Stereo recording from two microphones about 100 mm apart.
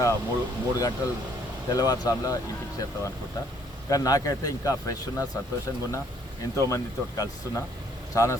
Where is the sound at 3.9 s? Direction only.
35° left (ahead or behind).